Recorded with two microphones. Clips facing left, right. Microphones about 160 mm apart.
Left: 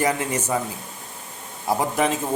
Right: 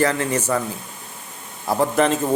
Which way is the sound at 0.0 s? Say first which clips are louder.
Right 3 dB; 15° left (ahead or behind).